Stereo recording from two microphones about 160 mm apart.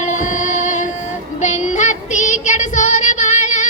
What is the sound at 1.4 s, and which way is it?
Child singing, 50° left (ahead or behind).